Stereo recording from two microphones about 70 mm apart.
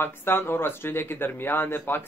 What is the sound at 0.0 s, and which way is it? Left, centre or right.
Speech, left.